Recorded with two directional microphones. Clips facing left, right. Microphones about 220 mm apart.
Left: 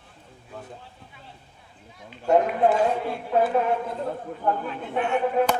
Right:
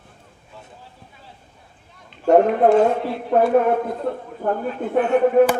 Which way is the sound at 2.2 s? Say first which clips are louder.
Right 6 dB; 50° right (ahead or behind).